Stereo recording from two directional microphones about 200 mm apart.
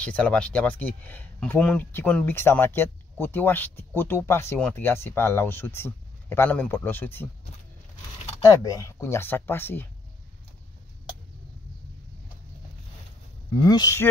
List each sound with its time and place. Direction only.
0.0 s speech: 5° left (ahead or behind)
8.5 s speech: 15° left (ahead or behind)
13.7 s speech: 15° left (ahead or behind)